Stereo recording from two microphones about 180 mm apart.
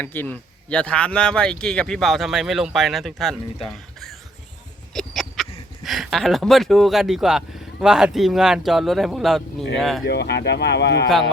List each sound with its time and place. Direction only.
0.0 s speech: 10° left (ahead or behind)
4.9 s speech: centre (ahead or behind)
10.0 s speech: 65° left (ahead or behind)